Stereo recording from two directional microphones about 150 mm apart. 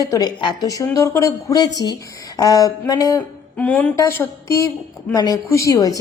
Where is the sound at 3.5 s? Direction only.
10° left (ahead or behind).